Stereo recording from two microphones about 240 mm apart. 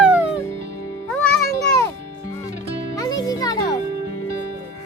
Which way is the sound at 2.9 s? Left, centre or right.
Centre.